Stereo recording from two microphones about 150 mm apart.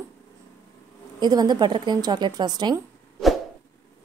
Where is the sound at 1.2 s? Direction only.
25° right (ahead or behind).